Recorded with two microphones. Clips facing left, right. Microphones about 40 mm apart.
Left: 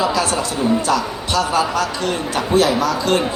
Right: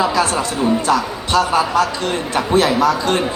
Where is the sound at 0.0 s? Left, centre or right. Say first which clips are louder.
Right 2 dB; right.